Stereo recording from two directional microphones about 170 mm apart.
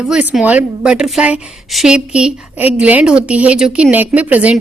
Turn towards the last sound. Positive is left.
turn(degrees=-10)  # may be behind; listen again after turning